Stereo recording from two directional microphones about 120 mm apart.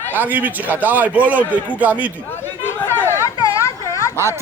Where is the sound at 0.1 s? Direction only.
15° right (ahead or behind).